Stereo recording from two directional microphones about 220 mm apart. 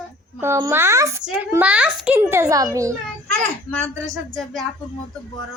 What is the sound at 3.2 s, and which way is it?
A child's voice, 5° left (ahead or behind).